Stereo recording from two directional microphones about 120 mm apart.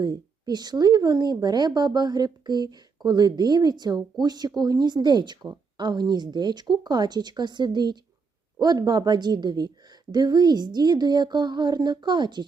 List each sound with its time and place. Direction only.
0.0 s speech: 35° right (ahead or behind)